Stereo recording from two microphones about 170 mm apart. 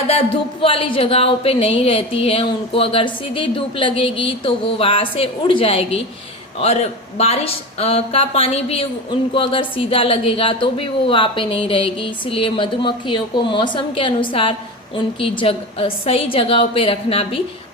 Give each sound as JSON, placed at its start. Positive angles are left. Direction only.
{"t": 0.6, "sound": "a woman's voice", "side_deg": 30}
{"t": 7.2, "sound": "a woman's voice", "side_deg": 35}